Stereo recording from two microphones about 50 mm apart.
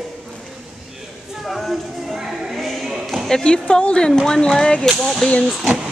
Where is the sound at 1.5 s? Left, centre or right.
Centre.